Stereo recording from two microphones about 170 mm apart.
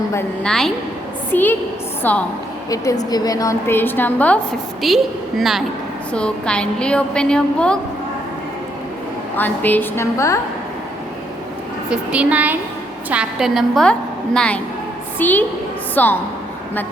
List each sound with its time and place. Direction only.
0.4 s a woman's voice: 5° left (ahead or behind)
9.3 s a woman's voice: 10° left (ahead or behind)
11.9 s a woman's voice: 5° right (ahead or behind); by 16.1 s 10° left (ahead or behind)